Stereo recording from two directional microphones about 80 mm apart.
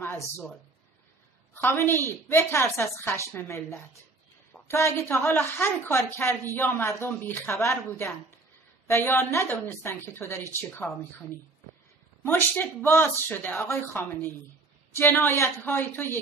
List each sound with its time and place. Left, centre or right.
1.5 s a woman's voice: left
13.7 s a woman's voice: left